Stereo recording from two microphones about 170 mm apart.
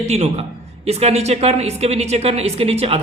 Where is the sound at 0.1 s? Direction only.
40° right (ahead or behind).